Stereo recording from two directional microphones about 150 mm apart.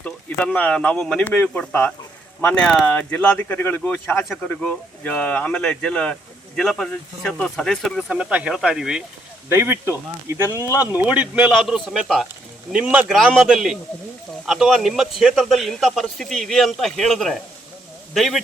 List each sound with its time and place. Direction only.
0.0 s speech: 10° left (ahead or behind)
9.5 s speech: 15° right (ahead or behind); by 18.4 s centre (ahead or behind)